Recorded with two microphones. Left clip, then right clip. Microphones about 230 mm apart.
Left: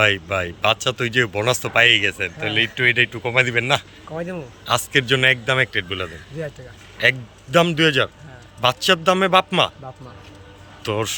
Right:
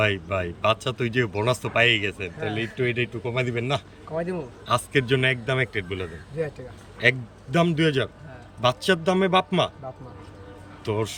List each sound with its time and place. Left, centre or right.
0.0 s speech: centre
4.1 s a man's voice: left
4.6 s speech: centre
10.8 s speech: centre